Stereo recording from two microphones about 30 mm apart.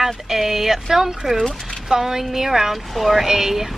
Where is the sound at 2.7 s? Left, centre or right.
Centre.